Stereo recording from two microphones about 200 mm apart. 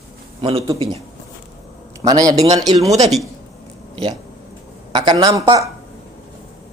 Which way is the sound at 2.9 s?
30° right (ahead or behind).